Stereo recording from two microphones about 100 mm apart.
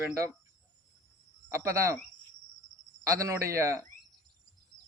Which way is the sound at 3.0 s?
35° right (ahead or behind).